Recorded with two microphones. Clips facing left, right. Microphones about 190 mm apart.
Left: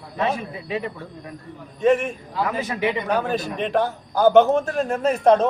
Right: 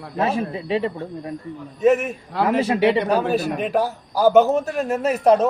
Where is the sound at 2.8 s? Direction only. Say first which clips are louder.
Right 4 dB; 90° right.